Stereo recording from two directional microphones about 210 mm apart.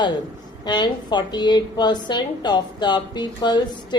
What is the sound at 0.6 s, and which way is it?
A woman's voice, 20° left (ahead or behind).